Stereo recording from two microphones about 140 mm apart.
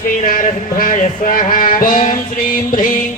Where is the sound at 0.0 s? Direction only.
70° left (ahead or behind).